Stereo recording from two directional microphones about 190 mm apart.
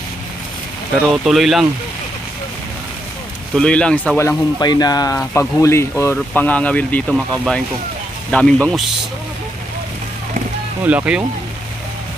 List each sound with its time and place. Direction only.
0.9 s speech: centre (ahead or behind)
3.5 s speech: 5° left (ahead or behind)
4.2 s speech: 20° left (ahead or behind)
10.8 s speech: 10° right (ahead or behind)